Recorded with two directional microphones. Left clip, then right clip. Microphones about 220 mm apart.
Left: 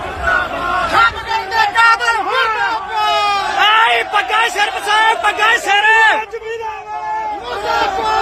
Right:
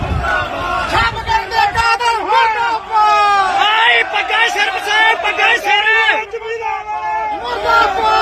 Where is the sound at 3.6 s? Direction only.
Centre (ahead or behind).